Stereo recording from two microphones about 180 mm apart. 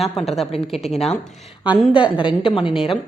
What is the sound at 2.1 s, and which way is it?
Speech, 30° left (ahead or behind).